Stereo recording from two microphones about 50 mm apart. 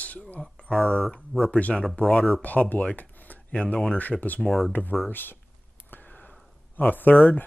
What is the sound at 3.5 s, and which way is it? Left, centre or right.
Speech, left.